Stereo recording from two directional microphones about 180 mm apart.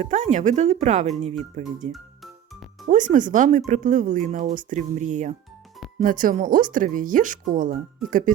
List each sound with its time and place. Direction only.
0.0 s speech: 40° right (ahead or behind)
1.9 s music: centre (ahead or behind)
2.8 s speech: 45° right (ahead or behind)